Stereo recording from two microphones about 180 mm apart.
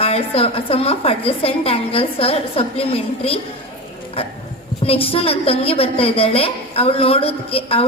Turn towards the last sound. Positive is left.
turn(degrees=30)  # may be behind; listen again after turning